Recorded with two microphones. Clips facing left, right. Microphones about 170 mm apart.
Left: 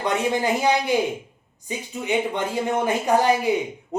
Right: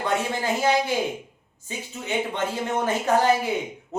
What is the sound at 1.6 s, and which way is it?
Speech, 15° left (ahead or behind).